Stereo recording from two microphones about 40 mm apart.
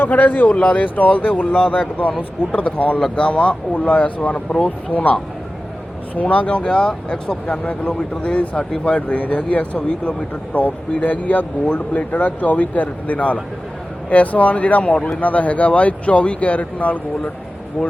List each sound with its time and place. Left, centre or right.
0.0 s a man's voice: left
6.6 s speech: left